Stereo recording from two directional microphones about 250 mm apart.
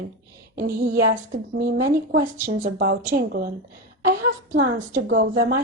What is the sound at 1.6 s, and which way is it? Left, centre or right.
Speech, right.